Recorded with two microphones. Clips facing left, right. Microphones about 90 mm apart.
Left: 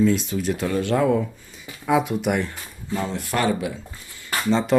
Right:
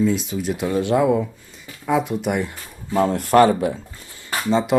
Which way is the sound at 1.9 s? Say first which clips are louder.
Even; centre (ahead or behind).